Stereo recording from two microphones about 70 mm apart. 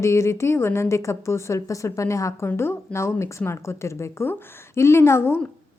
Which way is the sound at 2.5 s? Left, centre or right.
Left.